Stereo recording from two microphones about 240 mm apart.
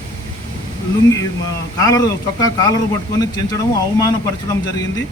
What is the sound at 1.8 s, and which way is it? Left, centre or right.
Speech, centre.